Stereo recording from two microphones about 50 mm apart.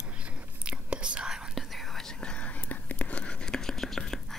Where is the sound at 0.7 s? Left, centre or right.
Right.